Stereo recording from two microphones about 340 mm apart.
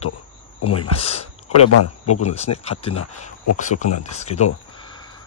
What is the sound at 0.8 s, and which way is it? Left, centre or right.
Speech, centre.